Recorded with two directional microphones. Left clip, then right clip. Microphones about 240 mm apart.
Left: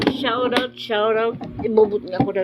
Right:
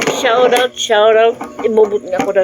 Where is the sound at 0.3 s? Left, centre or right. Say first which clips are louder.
Right 14 dB; centre.